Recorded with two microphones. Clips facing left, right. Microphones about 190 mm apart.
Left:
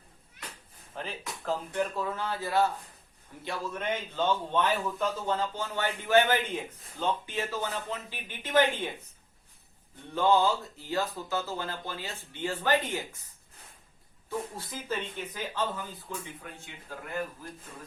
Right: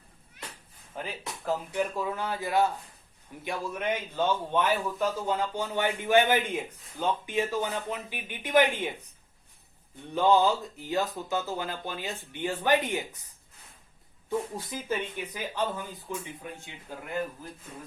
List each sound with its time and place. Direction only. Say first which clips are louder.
0.9 s a man's voice: right 1 dB; 10° right (ahead or behind)
10.2 s a man's voice: right 2 dB; 15° right (ahead or behind)
14.3 s a man's voice: right 4 dB; 15° right (ahead or behind)